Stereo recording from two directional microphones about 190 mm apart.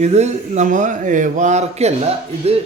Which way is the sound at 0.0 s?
35° right (ahead or behind).